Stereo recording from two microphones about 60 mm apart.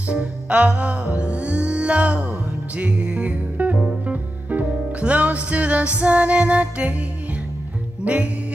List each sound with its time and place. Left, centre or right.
0.1 s music: right
8.0 s music: right